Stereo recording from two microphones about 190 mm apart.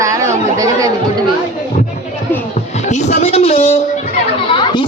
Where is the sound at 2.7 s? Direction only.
35° left (ahead or behind).